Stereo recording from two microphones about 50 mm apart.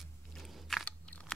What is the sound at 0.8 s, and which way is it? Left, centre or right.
Biting, left.